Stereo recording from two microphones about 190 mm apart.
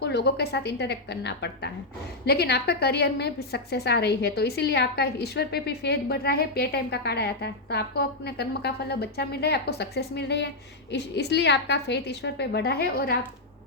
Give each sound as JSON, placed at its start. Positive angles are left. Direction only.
{"t": 0.0, "sound": "a woman's voice", "side_deg": 60}